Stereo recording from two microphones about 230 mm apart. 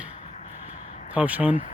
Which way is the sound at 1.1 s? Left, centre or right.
Centre.